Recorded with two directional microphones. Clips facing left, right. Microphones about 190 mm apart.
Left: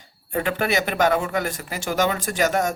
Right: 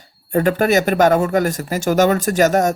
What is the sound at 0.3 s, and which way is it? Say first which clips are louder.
Speech: right 8 dB; 40° right (ahead or behind).